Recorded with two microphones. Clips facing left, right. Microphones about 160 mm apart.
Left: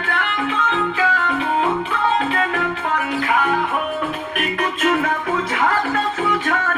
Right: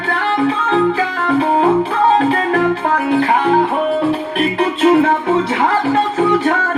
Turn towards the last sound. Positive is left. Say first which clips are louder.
# right 8 dB
turn(degrees=-30)  # may be behind; listen again after turning